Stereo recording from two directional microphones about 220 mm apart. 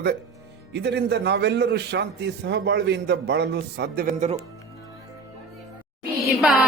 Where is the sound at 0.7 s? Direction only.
50° right (ahead or behind).